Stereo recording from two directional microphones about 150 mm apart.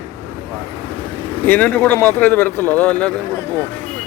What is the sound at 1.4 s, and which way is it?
Speech, 10° left (ahead or behind).